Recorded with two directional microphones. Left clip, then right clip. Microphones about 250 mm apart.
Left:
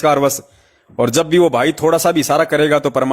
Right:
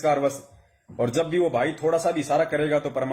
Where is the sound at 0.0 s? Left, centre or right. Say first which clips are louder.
Left 9 dB; left.